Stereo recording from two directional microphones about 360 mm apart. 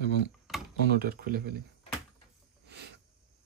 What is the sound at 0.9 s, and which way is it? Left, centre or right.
Speech, right.